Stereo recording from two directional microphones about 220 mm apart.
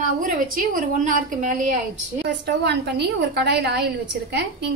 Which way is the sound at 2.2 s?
50° right (ahead or behind).